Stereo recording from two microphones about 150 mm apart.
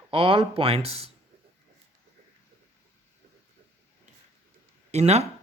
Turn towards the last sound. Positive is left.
turn(degrees=-45)  # may be behind; listen again after turning